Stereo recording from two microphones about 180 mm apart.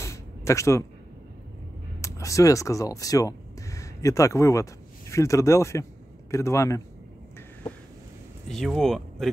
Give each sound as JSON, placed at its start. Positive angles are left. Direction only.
{"t": 0.0, "sound": "a sound", "side_deg": 15}
{"t": 2.0, "sound": "speech", "side_deg": 15}
{"t": 8.5, "sound": "speech", "side_deg": 0}